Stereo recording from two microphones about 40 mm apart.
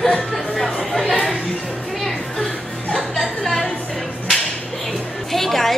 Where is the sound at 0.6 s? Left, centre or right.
Centre.